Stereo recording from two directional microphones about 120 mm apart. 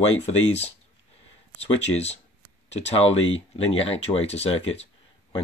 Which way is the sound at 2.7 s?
60° left (ahead or behind).